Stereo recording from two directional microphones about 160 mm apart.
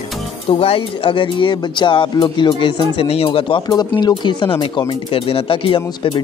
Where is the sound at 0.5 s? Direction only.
35° left (ahead or behind).